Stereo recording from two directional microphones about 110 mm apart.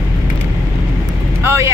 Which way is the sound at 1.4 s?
20° right (ahead or behind).